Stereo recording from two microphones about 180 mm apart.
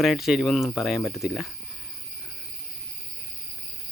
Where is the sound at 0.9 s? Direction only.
15° left (ahead or behind).